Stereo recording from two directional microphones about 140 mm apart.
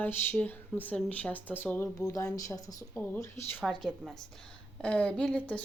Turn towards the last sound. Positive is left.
turn(degrees=10)  # may be behind; listen again after turning